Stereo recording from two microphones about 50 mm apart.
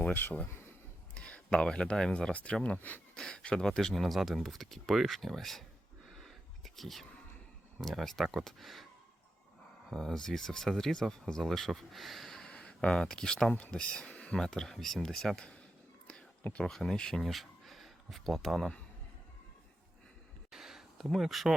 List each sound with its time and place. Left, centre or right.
0.1 s speech: left
0.4 s a sound: left
1.1 s speech: left
2.3 s speech: left
2.7 s speech: left
3.2 s speech: centre
6.7 s speech: centre
9.9 s speech: centre
14.1 s a sound: left
14.3 s speech: centre
16.6 s speech: centre
17.2 s speech: centre
20.5 s a sound: centre